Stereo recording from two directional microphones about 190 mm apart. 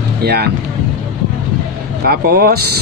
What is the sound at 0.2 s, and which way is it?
Speech, 55° right (ahead or behind).